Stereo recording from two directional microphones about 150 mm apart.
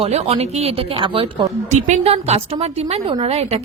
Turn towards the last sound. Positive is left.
turn(degrees=-40)  # may be behind; listen again after turning